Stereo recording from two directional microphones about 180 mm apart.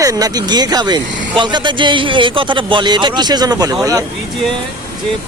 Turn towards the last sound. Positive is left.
turn(degrees=-20)  # may be behind; listen again after turning